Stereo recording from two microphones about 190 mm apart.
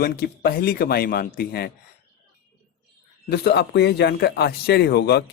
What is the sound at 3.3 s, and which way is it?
Speech, 60° left (ahead or behind).